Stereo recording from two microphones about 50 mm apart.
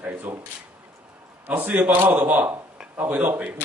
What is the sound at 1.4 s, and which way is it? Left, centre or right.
A man's voice, right.